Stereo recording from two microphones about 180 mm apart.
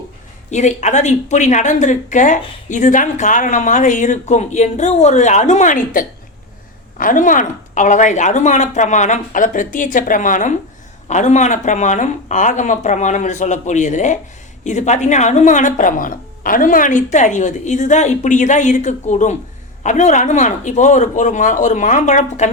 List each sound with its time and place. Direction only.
0.5 s speech: 40° left (ahead or behind)